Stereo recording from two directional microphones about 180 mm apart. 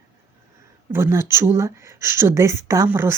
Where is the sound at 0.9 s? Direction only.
15° right (ahead or behind).